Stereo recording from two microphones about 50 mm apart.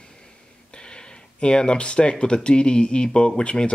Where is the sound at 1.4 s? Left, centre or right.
Centre.